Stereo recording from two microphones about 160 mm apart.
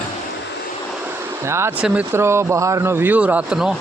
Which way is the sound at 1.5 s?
15° right (ahead or behind).